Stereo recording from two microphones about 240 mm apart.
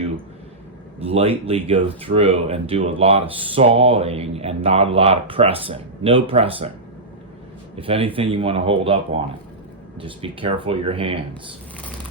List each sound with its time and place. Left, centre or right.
0.9 s speech: right
7.8 s speech: right
10.0 s speech: right